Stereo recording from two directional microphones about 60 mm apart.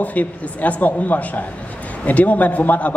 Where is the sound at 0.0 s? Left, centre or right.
Left.